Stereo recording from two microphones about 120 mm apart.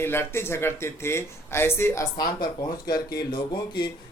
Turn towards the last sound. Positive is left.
turn(degrees=40)  # may be behind; listen again after turning